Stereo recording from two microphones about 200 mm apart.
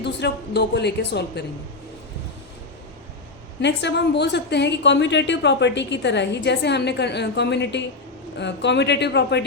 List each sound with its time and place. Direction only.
0.0 s a woman's voice: 60° left (ahead or behind)
3.6 s a woman's voice: 60° left (ahead or behind)